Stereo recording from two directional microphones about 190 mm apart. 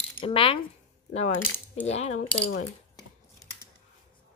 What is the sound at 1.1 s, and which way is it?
Coin, 35° left (ahead or behind).